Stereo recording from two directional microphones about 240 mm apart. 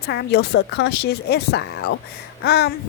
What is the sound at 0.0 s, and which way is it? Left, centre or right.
A woman's voice, left.